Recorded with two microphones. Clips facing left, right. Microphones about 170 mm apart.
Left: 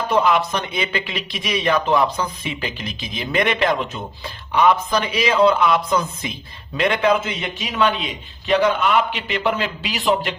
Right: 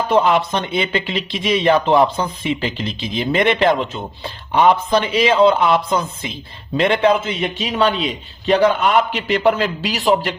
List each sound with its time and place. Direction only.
0.1 s a man's voice: 30° right (ahead or behind)